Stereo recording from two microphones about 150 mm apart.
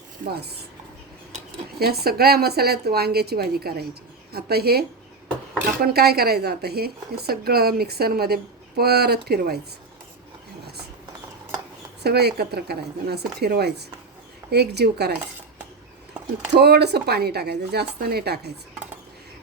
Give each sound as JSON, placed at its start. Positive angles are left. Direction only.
{"t": 0.3, "sound": "a woman's voice", "side_deg": -90}
{"t": 1.8, "sound": "a woman's voice", "side_deg": -90}
{"t": 12.0, "sound": "a woman's voice", "side_deg": -90}
{"t": 16.6, "sound": "a woman's voice", "side_deg": -90}